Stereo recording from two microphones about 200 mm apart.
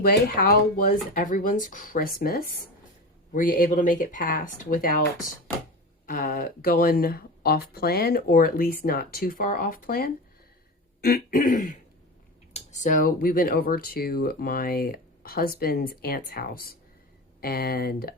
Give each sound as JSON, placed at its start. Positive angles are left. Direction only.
{"t": 0.0, "sound": "speech", "side_deg": 50}
{"t": 6.1, "sound": "speech", "side_deg": 45}